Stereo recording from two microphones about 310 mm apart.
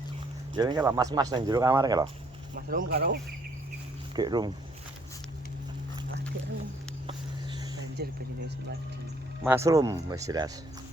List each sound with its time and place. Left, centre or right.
0.5 s speech: centre
2.6 s speech: right
4.1 s speech: centre
8.0 s speech: right
9.4 s speech: centre